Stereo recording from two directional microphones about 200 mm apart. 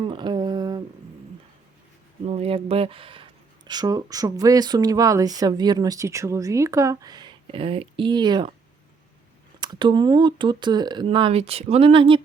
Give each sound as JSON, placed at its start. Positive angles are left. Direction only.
{"t": 0.0, "sound": "a sound", "side_deg": -25}
{"t": 2.2, "sound": "speech", "side_deg": -30}
{"t": 9.6, "sound": "speech", "side_deg": -20}